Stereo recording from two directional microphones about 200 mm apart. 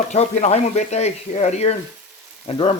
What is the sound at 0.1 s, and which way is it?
Speech, 35° left (ahead or behind).